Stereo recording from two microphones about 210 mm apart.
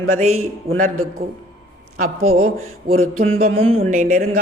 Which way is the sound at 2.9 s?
75° right (ahead or behind).